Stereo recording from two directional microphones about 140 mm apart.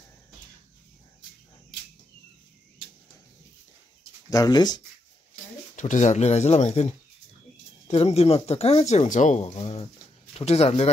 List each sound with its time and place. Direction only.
4.3 s speech: 30° left (ahead or behind)
5.8 s speech: 60° left (ahead or behind)